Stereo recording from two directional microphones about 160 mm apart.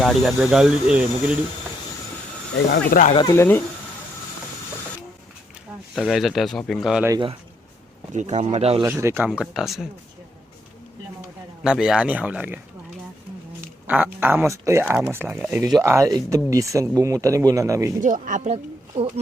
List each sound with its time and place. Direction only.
0.0 s speech: centre (ahead or behind)
2.8 s speech: 65° left (ahead or behind)
3.2 s speech: 15° left (ahead or behind)
5.9 s speech: centre (ahead or behind)
8.1 s speech: 45° right (ahead or behind)
8.9 s speech: 15° right (ahead or behind)
11.6 s speech: 5° right (ahead or behind)
13.8 s speech: 10° right (ahead or behind)
18.0 s speech: 50° right (ahead or behind)